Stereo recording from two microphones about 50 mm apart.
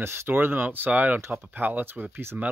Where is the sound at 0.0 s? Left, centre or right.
Right.